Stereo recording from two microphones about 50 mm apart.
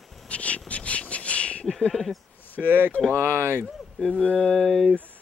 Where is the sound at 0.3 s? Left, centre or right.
Left.